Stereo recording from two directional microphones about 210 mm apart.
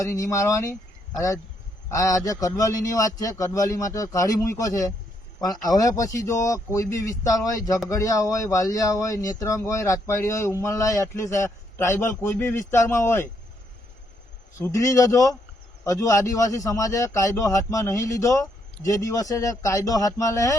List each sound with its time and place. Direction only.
0.0 s a man's voice: 15° left (ahead or behind)
1.9 s a man's voice: 15° left (ahead or behind)
14.6 s a man's voice: 15° left (ahead or behind)